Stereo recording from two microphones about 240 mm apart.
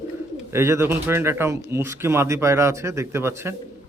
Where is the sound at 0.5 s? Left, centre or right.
Centre.